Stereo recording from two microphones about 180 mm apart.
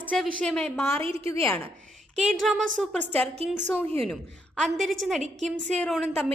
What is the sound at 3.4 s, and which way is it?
Speech, 35° right (ahead or behind).